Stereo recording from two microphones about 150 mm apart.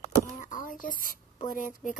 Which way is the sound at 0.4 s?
60° left (ahead or behind).